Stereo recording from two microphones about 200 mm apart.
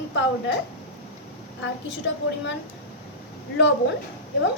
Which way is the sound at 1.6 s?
65° left (ahead or behind).